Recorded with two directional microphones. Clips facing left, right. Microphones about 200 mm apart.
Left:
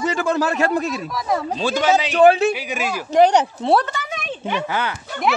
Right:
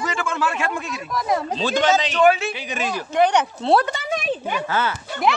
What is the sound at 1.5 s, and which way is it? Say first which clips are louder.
Speech: left 2 dB; 10° left (ahead or behind).